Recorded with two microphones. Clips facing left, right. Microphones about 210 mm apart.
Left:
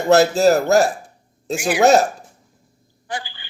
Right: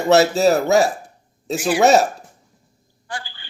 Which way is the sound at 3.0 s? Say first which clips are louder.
Left 3 dB; 20° left (ahead or behind).